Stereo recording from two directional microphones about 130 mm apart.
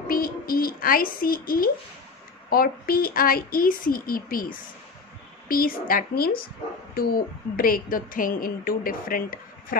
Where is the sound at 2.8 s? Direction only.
90° left.